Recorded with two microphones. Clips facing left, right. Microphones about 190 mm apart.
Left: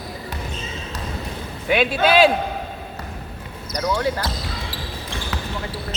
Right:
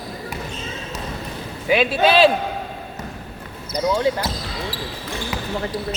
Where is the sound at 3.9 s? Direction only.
20° right (ahead or behind).